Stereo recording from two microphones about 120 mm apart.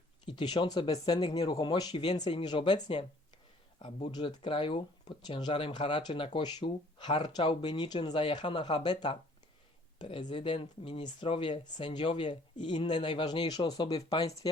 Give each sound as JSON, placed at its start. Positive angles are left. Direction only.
{"t": 0.3, "sound": "speech", "side_deg": 45}